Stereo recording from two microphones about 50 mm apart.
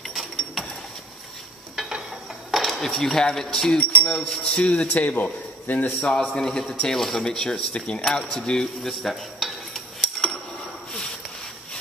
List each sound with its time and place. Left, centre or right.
0.0 s bird: centre
1.8 s a sound: centre
2.9 s speech: centre
3.8 s speech: left
5.9 s speech: centre
8.8 s dishes: centre